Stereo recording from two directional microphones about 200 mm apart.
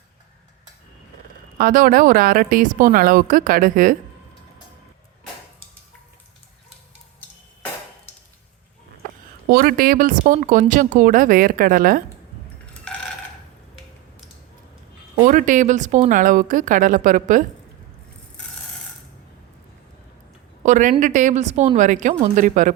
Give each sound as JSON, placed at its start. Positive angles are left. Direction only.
{"t": 1.5, "sound": "speech", "side_deg": -45}
{"t": 9.5, "sound": "speech", "side_deg": -45}
{"t": 12.9, "sound": "a sound", "side_deg": 5}
{"t": 15.2, "sound": "speech", "side_deg": -40}
{"t": 20.7, "sound": "speech", "side_deg": -40}